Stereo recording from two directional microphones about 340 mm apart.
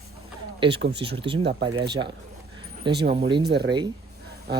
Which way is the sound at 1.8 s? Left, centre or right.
Centre.